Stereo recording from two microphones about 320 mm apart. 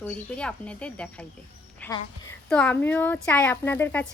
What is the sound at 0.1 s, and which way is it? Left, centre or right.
Speech, centre.